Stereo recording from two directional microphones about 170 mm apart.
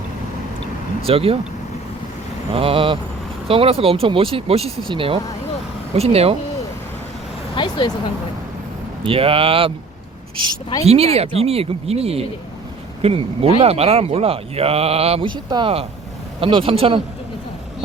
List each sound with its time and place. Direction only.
1.0 s speech: 35° right (ahead or behind)
2.5 s speech: 30° right (ahead or behind)
7.5 s vehicle: 30° left (ahead or behind)
9.0 s speech: 30° right (ahead or behind)
10.8 s speech: 35° right (ahead or behind)